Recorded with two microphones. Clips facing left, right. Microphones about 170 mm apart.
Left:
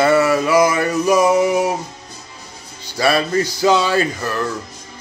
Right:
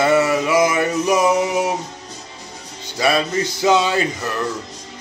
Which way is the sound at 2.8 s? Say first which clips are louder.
Left 1 dB; 15° right (ahead or behind).